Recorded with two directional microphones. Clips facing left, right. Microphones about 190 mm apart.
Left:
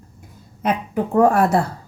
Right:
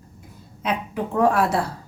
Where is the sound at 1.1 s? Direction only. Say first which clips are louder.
Left 4 dB; 50° left (ahead or behind).